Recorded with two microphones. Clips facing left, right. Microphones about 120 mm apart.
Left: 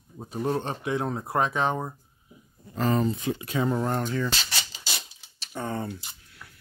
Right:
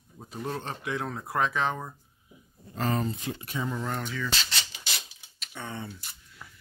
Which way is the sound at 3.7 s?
40° left (ahead or behind).